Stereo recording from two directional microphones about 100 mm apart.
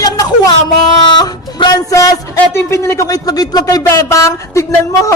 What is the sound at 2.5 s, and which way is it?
A woman's voice, 25° left (ahead or behind).